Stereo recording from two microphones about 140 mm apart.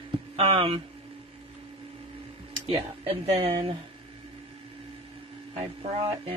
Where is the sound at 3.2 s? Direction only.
45° right (ahead or behind).